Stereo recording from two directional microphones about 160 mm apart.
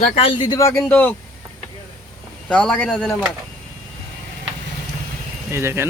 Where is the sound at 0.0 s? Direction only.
40° left (ahead or behind); by 1.1 s 10° left (ahead or behind).